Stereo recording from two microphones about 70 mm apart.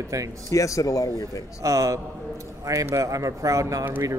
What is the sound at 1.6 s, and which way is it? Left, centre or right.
A man's voice, right.